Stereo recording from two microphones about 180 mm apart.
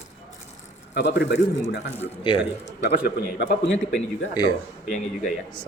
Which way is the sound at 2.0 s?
30° left (ahead or behind).